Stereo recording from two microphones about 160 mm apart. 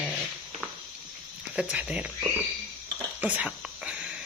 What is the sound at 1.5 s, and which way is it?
Speech, 5° right (ahead or behind).